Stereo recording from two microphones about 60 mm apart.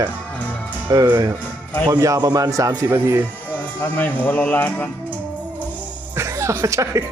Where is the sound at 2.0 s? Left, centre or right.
Right.